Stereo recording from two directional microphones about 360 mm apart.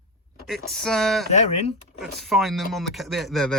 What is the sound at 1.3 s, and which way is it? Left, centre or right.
Speech, centre.